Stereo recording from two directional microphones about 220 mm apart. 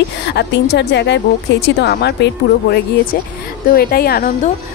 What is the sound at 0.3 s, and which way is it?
A woman's voice, 50° left (ahead or behind).